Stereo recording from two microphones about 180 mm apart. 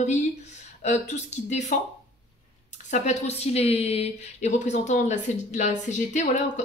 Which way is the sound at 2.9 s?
40° left (ahead or behind).